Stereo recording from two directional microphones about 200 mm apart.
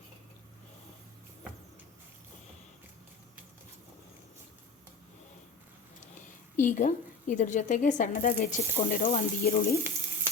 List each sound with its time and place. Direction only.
6.2 s a woman's voice: 40° left (ahead or behind)
9.4 s frying: 50° left (ahead or behind)